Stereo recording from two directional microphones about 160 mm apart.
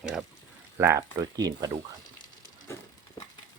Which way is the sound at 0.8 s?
15° right (ahead or behind).